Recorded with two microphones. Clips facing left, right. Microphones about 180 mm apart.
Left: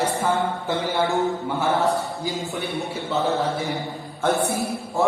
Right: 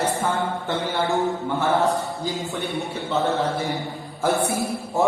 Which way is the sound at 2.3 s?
Centre (ahead or behind).